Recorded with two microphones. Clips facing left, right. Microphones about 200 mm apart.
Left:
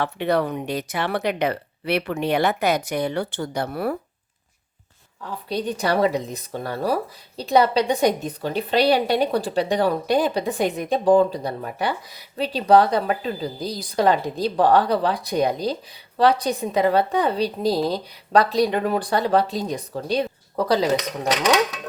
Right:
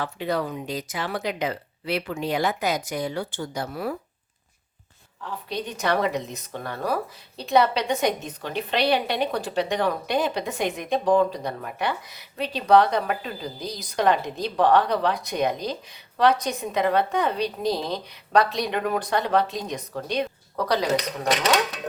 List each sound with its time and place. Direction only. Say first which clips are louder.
0.0 s speech: left 5 dB; 65° left (ahead or behind)
5.5 s speech: left 3 dB; 35° left (ahead or behind)